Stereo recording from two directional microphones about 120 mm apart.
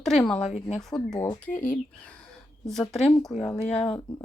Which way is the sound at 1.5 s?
90° left.